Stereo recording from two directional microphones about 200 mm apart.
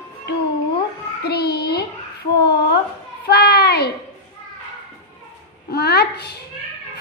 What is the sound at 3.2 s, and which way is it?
Speech, 55° left (ahead or behind).